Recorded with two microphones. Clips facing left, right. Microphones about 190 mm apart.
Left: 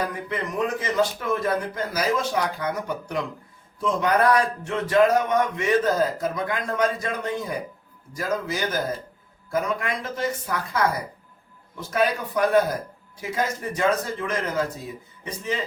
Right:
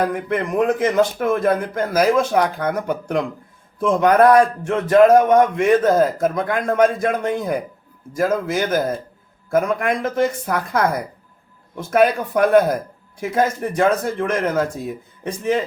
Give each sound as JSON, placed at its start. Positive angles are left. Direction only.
{"t": 0.0, "sound": "speech", "side_deg": -55}